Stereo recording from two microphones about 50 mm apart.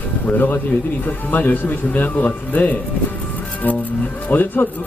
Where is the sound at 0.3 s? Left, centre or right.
Left.